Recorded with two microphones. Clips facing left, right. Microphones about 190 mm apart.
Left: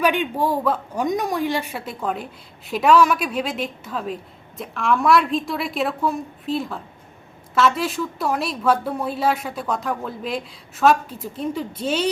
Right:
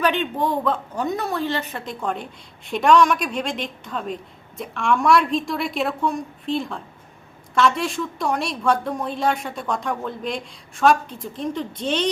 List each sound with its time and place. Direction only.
0.0 s a woman's voice: 10° left (ahead or behind)